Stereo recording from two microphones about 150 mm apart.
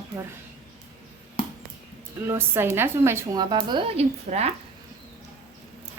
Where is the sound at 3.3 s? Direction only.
30° right (ahead or behind); by 4.5 s 45° right (ahead or behind).